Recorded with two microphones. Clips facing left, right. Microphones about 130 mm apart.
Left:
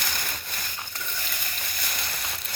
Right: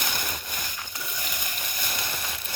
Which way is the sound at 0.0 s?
20° right (ahead or behind).